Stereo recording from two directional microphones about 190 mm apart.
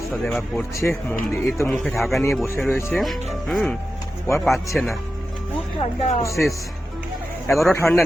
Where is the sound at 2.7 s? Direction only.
15° left (ahead or behind).